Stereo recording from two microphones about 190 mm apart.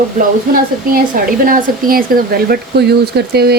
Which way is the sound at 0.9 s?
45° right (ahead or behind).